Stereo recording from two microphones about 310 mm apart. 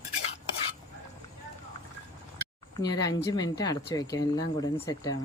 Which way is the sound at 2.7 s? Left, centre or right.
Centre.